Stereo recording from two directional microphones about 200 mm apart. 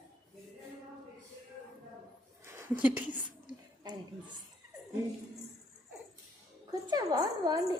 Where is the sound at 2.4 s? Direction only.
10° right (ahead or behind).